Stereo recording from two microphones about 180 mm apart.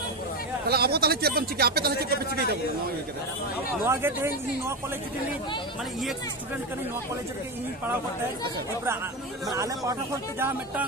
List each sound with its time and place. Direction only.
0.7 s speech: 60° right (ahead or behind)
3.8 s speech: 15° right (ahead or behind)
9.5 s speech: 20° right (ahead or behind)